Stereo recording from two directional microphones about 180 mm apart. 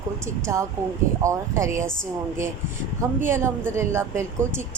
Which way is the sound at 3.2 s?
15° right (ahead or behind).